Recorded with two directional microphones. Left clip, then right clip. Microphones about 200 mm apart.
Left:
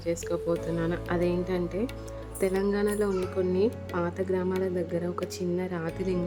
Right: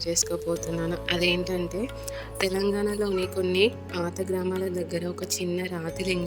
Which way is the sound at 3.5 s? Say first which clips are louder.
Right 3 dB; 50° right (ahead or behind).